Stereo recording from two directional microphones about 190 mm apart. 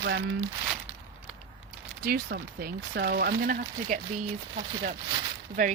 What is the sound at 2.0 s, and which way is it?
Speech, 55° right (ahead or behind).